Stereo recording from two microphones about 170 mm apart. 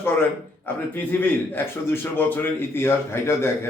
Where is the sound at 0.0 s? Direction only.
10° left (ahead or behind).